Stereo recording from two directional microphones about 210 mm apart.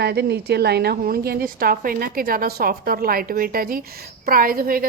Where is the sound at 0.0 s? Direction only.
50° right (ahead or behind).